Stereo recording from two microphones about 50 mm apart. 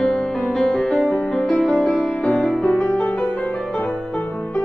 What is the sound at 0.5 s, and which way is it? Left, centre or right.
Music, centre.